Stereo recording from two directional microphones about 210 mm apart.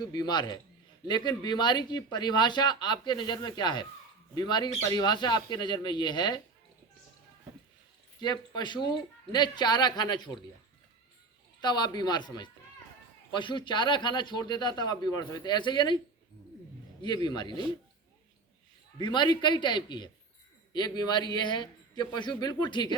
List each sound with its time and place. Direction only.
0.0 s speech: 20° left (ahead or behind)
8.2 s speech: 20° left (ahead or behind)
11.6 s speech: 20° left (ahead or behind)
17.0 s speech: 20° left (ahead or behind)
17.5 s speech: 25° right (ahead or behind)
18.9 s speech: 20° left (ahead or behind)